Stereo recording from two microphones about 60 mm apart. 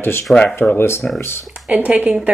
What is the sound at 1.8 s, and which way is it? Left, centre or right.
Speech, right.